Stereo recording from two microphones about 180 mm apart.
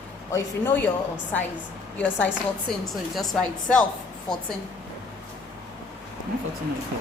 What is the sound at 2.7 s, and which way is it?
A woman's voice, centre (ahead or behind).